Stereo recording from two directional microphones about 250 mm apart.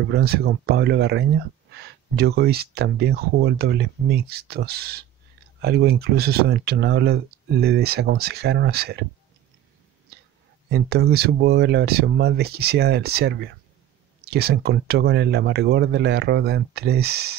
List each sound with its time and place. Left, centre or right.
0.1 s speech: right
10.7 s speech: right